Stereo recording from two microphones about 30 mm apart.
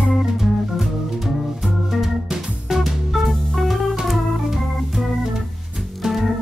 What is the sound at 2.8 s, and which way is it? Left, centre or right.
Music, centre.